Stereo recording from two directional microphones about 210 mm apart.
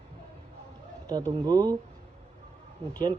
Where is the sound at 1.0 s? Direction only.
25° right (ahead or behind).